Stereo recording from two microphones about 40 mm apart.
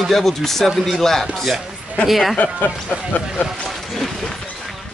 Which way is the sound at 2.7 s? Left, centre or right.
Centre.